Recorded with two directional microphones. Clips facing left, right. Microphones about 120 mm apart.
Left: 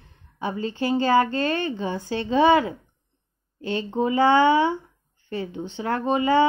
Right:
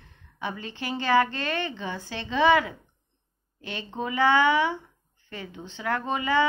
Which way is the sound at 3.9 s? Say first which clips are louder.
Left 4 dB; 25° left (ahead or behind).